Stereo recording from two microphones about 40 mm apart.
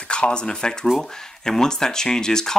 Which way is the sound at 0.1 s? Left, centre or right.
Left.